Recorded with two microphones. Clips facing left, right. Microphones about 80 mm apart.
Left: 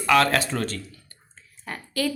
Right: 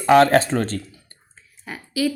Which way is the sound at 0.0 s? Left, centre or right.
Right.